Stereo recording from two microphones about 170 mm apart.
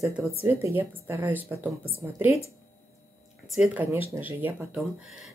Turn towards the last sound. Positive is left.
turn(degrees=-10)  # may be behind; listen again after turning